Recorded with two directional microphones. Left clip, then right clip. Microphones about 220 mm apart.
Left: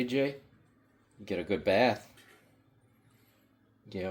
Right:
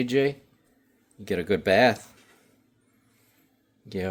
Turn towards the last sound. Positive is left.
turn(degrees=-45)  # may be behind; listen again after turning